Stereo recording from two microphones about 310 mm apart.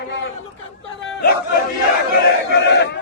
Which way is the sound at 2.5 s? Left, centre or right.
Left.